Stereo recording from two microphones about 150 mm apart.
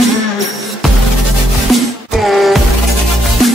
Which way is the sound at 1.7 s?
Centre (ahead or behind).